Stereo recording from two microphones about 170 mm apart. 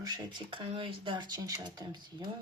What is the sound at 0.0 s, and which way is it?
Speech, 25° right (ahead or behind).